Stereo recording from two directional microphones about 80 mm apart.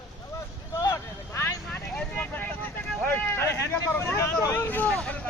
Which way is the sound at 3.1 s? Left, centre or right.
Left.